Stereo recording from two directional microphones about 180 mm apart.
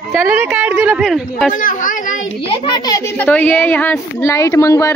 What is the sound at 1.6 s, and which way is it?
Speech, 50° left (ahead or behind).